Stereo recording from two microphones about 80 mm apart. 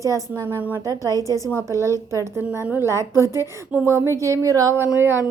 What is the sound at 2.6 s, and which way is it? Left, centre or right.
Speech, right.